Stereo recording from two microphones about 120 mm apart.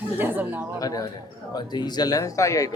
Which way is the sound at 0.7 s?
30° left (ahead or behind).